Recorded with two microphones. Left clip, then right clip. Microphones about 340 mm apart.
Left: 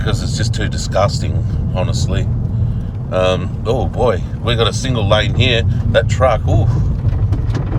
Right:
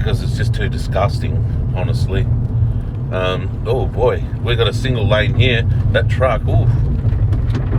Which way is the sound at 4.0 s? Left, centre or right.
Centre.